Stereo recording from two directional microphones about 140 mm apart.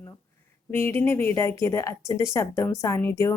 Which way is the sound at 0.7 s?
15° left (ahead or behind).